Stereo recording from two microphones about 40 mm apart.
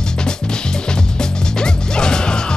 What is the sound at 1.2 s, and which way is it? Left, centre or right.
Music, centre.